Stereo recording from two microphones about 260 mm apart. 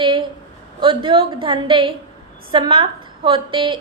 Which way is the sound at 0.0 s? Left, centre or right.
Centre.